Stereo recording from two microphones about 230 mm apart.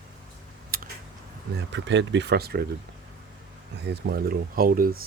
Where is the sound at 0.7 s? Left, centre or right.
Right.